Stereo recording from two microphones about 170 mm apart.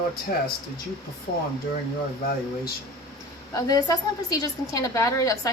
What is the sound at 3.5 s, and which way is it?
A woman's voice, 20° left (ahead or behind).